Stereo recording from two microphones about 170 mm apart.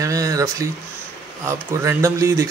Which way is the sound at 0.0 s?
20° right (ahead or behind).